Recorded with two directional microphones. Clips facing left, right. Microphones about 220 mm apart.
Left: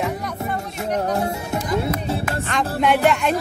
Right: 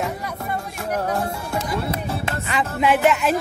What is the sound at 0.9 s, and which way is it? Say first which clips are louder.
Music: left 2 dB; 30° left (ahead or behind).